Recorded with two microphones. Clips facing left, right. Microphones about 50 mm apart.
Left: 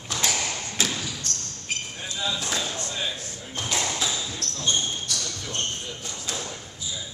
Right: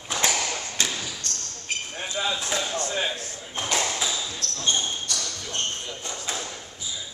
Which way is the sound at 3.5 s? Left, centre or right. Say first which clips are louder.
Right 2 dB; right.